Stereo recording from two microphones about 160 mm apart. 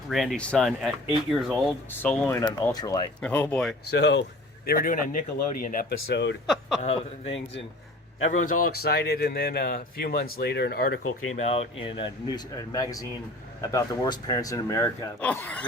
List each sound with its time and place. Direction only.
0.1 s speech: centre (ahead or behind)
2.0 s speech: 10° left (ahead or behind)
3.2 s speech: 10° left (ahead or behind)
3.8 s speech: 90° left
4.6 s a man's voice: 65° left (ahead or behind)
5.6 s speech: 70° left (ahead or behind); by 6.3 s 85° left
6.5 s speech: centre (ahead or behind)
6.8 s speech: 40° left (ahead or behind); by 11.0 s 75° left (ahead or behind)
11.0 s speech: 45° left (ahead or behind); by 15.6 s 10° left (ahead or behind)